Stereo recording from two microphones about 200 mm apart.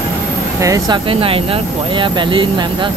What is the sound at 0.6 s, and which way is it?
Speech, 20° right (ahead or behind).